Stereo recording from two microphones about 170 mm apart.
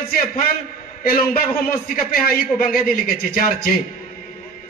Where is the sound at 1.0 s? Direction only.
60° left (ahead or behind).